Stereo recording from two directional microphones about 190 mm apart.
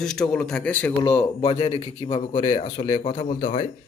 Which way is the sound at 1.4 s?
30° left (ahead or behind).